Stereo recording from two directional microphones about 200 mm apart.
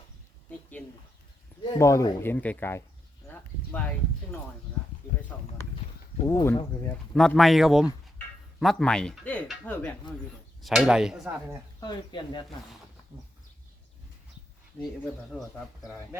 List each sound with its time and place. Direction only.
1.6 s speech: 15° left (ahead or behind)
3.2 s a sound: 5° left (ahead or behind)
5.3 s a sound: 5° left (ahead or behind)
6.2 s speech: 15° left (ahead or behind)
6.8 s speech: 5° left (ahead or behind)
11.8 s speech: 20° left (ahead or behind)
15.0 s speech: centre (ahead or behind)